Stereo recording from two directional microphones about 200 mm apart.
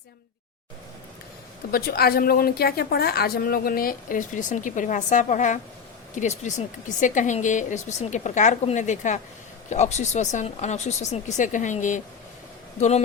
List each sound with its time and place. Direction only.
1.7 s a woman's voice: 50° left (ahead or behind)